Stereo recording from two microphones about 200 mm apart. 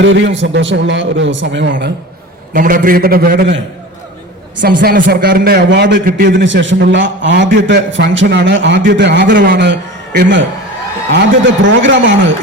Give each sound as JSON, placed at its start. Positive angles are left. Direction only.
{"t": 0.0, "sound": "a man's voice", "side_deg": -65}
{"t": 2.5, "sound": "a man's voice", "side_deg": -45}
{"t": 4.6, "sound": "a man's voice", "side_deg": -45}
{"t": 9.2, "sound": "a man's voice", "side_deg": -45}
{"t": 10.2, "sound": "a man's voice", "side_deg": -65}